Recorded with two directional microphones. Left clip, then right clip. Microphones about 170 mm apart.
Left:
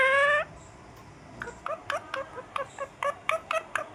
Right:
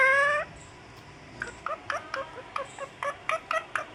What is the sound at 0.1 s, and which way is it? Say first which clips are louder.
Fowl: left 1 dB; 20° left (ahead or behind).